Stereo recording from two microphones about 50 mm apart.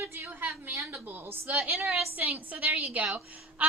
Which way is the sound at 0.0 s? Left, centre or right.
Right.